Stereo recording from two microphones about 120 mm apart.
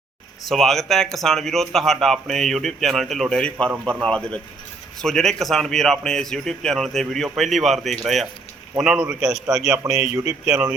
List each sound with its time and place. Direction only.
0.4 s speech: centre (ahead or behind)
9.8 s speech: 25° right (ahead or behind)
10.4 s speech: 10° right (ahead or behind)